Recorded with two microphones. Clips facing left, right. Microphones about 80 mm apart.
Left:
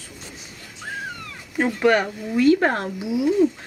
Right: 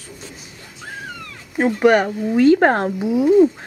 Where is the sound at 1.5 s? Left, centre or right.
Centre.